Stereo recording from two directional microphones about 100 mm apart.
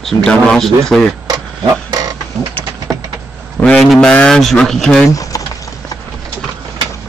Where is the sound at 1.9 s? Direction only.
40° right (ahead or behind).